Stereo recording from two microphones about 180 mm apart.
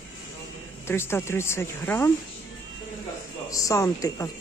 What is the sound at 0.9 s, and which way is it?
A woman's voice, 15° left (ahead or behind).